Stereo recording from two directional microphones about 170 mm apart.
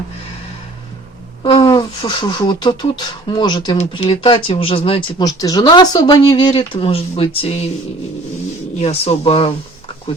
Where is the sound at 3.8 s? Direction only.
35° left (ahead or behind).